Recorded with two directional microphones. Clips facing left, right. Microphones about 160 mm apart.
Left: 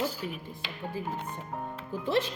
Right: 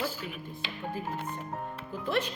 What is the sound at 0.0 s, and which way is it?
Music, 15° left (ahead or behind).